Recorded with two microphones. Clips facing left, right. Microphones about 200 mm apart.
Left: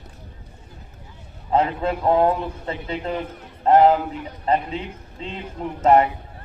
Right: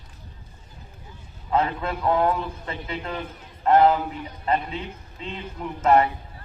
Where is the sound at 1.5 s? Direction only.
25° left (ahead or behind).